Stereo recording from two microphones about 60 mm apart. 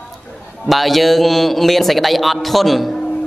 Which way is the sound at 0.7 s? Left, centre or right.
Centre.